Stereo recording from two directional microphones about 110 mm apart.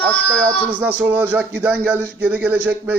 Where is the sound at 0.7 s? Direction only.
15° right (ahead or behind).